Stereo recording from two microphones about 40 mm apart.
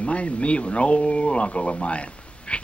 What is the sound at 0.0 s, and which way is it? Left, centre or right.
Speech, left.